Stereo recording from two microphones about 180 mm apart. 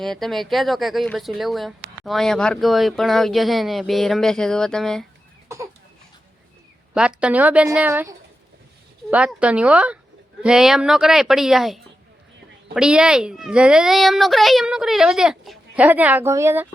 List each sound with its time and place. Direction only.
0.0 s speech: centre (ahead or behind)
7.2 s a woman's voice: 5° right (ahead or behind)